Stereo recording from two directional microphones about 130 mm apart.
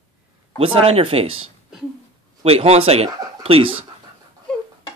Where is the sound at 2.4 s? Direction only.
50° right (ahead or behind).